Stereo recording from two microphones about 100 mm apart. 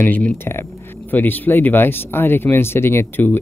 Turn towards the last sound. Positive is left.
turn(degrees=20)  # may be behind; listen again after turning